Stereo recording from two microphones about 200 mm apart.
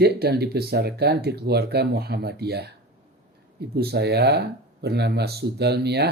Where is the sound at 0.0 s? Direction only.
50° right (ahead or behind).